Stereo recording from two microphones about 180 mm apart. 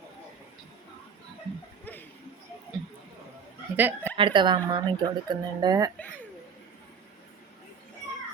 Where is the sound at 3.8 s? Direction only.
10° right (ahead or behind).